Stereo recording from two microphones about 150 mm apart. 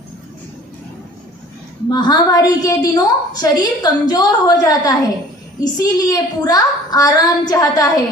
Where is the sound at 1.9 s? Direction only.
25° left (ahead or behind).